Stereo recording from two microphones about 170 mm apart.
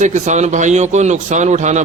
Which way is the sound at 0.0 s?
45° right (ahead or behind).